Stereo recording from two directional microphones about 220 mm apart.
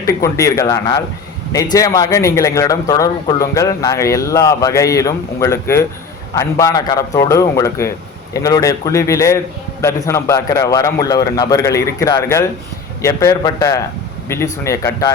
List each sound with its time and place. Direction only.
0.0 s a man's voice: 15° left (ahead or behind)